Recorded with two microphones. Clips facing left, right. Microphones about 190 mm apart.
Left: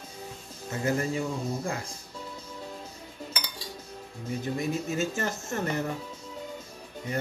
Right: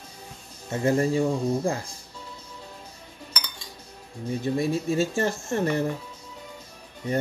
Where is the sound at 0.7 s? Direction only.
30° right (ahead or behind).